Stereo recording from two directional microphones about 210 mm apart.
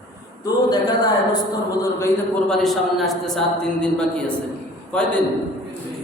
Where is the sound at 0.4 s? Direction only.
20° left (ahead or behind).